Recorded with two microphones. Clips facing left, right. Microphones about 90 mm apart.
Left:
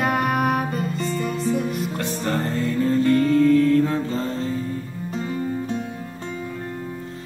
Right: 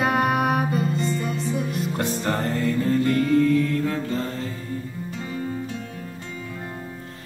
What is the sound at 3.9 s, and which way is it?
Mantra, 25° left (ahead or behind).